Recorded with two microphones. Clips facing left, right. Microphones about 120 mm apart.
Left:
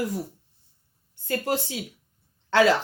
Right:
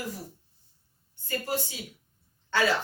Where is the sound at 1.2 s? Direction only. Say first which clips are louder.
Left 5 dB; 85° left.